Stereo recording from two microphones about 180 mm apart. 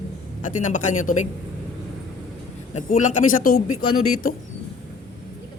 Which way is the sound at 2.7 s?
45° left (ahead or behind).